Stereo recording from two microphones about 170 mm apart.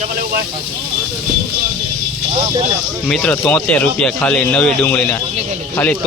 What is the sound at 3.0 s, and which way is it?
Speech, 5° left (ahead or behind).